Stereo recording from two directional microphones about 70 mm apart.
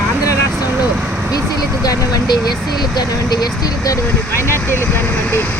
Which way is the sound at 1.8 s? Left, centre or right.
Left.